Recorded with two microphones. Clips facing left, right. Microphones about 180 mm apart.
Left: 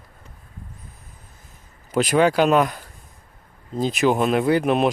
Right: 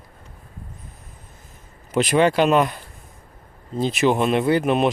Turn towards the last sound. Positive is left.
turn(degrees=0)  # may be behind; listen again after turning